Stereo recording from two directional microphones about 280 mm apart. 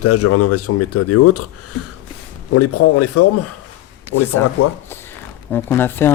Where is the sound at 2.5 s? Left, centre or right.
Left.